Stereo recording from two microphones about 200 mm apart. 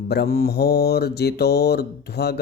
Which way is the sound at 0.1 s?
50° left (ahead or behind).